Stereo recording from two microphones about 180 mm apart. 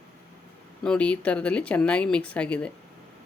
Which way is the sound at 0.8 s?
5° left (ahead or behind).